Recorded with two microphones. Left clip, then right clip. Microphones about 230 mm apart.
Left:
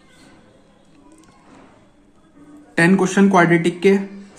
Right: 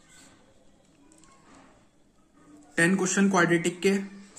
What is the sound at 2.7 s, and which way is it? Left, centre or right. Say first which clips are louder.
Speech: left 8 dB; centre.